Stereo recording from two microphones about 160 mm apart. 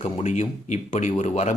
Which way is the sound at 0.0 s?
45° left (ahead or behind).